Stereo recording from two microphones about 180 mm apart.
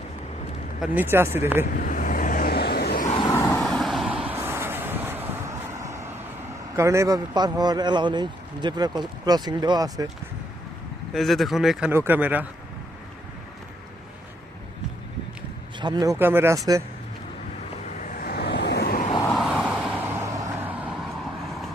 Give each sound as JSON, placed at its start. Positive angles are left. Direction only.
{"t": 0.8, "sound": "speech", "side_deg": -10}
{"t": 1.6, "sound": "vehicle", "side_deg": 50}
{"t": 3.2, "sound": "vehicle", "side_deg": 15}
{"t": 3.6, "sound": "vehicle", "side_deg": 0}
{"t": 6.7, "sound": "a man's voice", "side_deg": -15}
{"t": 11.1, "sound": "speech", "side_deg": 0}
{"t": 15.8, "sound": "speech", "side_deg": -25}
{"t": 18.1, "sound": "vehicle", "side_deg": 55}
{"t": 19.3, "sound": "vehicle", "side_deg": 0}